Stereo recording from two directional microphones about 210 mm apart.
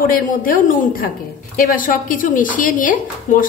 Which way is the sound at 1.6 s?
40° left (ahead or behind).